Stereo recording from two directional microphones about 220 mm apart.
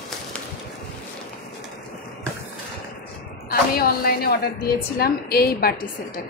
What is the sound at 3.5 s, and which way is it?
A woman's voice, 45° left (ahead or behind).